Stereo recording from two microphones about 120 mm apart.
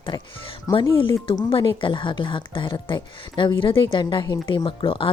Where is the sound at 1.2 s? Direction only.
45° left (ahead or behind).